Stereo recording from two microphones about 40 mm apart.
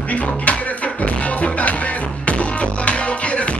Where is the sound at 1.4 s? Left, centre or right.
Left.